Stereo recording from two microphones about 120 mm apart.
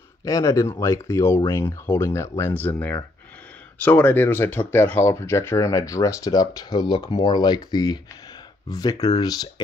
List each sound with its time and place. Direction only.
0.2 s speech: 25° left (ahead or behind)
3.8 s speech: 15° left (ahead or behind); by 9.5 s 30° left (ahead or behind)